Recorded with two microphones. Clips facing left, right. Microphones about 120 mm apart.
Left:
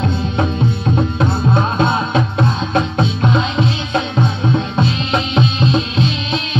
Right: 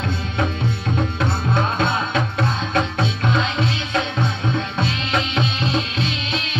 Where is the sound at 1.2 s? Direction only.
20° left (ahead or behind).